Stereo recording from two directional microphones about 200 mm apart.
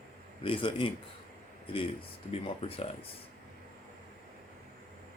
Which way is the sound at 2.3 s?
30° left (ahead or behind).